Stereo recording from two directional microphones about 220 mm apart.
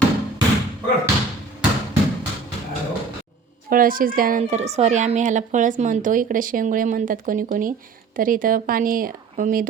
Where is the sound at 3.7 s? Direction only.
40° right (ahead or behind).